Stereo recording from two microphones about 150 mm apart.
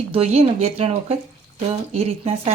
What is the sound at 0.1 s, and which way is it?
Speech, 40° right (ahead or behind).